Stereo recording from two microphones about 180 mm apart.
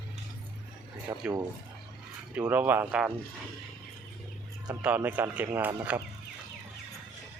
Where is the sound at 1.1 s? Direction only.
15° right (ahead or behind).